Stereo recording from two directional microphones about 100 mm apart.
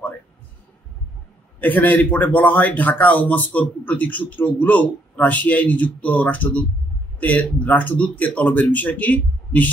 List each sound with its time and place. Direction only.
1.6 s a man's voice: 15° left (ahead or behind)